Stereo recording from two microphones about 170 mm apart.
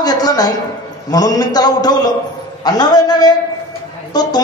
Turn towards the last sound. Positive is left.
turn(degrees=25)  # may be behind; listen again after turning